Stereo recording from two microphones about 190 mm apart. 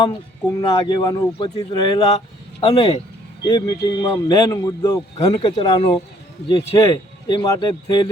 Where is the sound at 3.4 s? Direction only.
20° left (ahead or behind).